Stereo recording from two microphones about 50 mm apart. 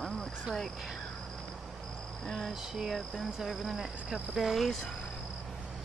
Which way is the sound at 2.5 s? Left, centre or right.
Centre.